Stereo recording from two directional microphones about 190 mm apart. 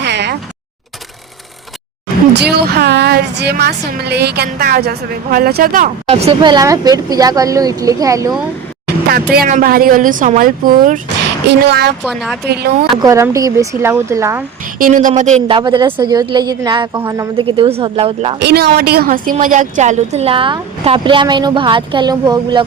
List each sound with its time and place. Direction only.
0.0 s a sound: 65° right (ahead or behind)
2.3 s a woman's voice: 60° right (ahead or behind)
6.1 s speech: 35° right (ahead or behind); by 8.3 s 15° right (ahead or behind)
9.3 s speech: 50° right (ahead or behind)
11.4 s a woman's voice: 60° right (ahead or behind)
12.0 s a woman's voice: centre (ahead or behind)
12.5 s a woman's voice: 55° right (ahead or behind)
13.0 s speech: 15° right (ahead or behind)
14.8 s a woman's voice: 45° right (ahead or behind)
15.4 s speech: 25° right (ahead or behind)
18.3 s a woman's voice: 60° right (ahead or behind); by 22.6 s 20° right (ahead or behind)